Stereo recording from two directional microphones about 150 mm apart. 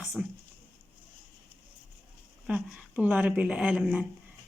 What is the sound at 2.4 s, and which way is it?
Speech, 5° right (ahead or behind).